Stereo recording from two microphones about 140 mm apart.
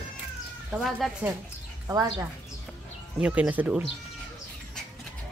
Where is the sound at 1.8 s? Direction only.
20° right (ahead or behind).